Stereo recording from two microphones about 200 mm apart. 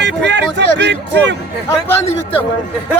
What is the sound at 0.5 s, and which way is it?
Speech, 60° right (ahead or behind).